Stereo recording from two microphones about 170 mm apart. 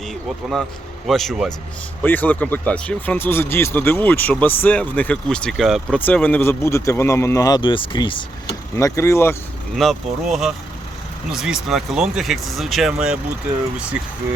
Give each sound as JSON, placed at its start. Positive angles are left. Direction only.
{"t": 1.0, "sound": "speech", "side_deg": 0}
{"t": 8.7, "sound": "speech", "side_deg": 15}
{"t": 9.7, "sound": "speech", "side_deg": 0}